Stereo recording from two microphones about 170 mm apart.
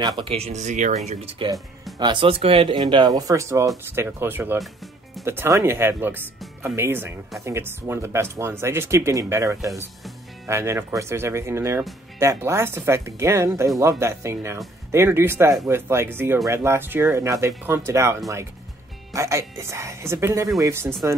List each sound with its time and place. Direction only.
0.2 s speech: 35° right (ahead or behind)
2.0 s speech: 30° right (ahead or behind)
19.1 s speech: 20° right (ahead or behind)